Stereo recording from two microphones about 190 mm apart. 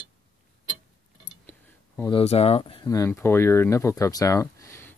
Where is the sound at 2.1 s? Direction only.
30° left (ahead or behind).